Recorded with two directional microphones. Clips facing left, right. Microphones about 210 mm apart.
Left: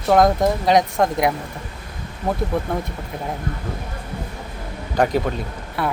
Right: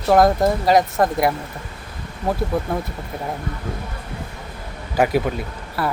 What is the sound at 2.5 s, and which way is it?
Speech, 5° right (ahead or behind).